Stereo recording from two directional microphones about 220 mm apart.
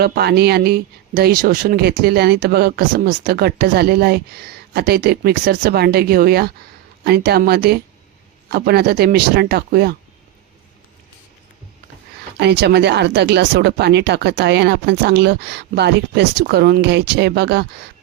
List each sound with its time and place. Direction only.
0.0 s speech: 45° right (ahead or behind)
12.4 s speech: 50° right (ahead or behind)